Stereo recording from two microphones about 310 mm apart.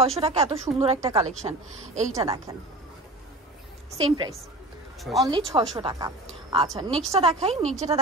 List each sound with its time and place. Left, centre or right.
0.0 s a woman's voice: centre
4.0 s a woman's voice: centre
5.0 s speech: centre
5.3 s a woman's voice: centre